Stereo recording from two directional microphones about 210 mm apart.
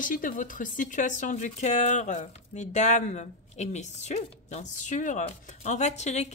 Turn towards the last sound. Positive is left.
turn(degrees=35)  # may be behind; listen again after turning